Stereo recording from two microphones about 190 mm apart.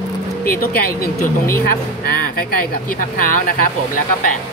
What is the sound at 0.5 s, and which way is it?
Speech, 50° left (ahead or behind).